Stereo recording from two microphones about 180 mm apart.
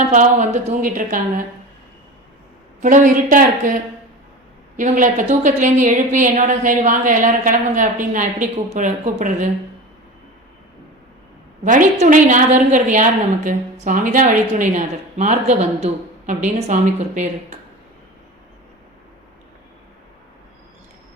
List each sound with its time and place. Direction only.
0.1 s a woman's voice: 45° right (ahead or behind)
2.8 s a woman's voice: 45° right (ahead or behind)
4.8 s a woman's voice: 45° right (ahead or behind)
11.6 s a woman's voice: 45° right (ahead or behind)